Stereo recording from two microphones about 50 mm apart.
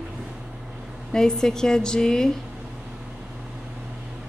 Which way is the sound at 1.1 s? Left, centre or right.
Centre.